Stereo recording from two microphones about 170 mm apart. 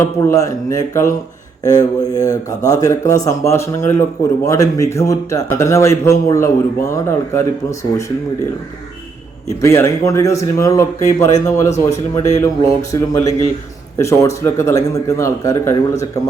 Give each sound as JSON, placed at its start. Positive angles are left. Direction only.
{"t": 0.0, "sound": "speech", "side_deg": 15}
{"t": 9.6, "sound": "speech", "side_deg": 15}